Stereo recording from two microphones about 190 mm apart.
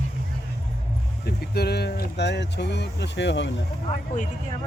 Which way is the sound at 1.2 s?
55° left (ahead or behind).